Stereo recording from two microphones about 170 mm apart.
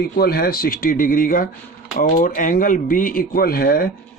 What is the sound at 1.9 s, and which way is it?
Speech, 55° left (ahead or behind).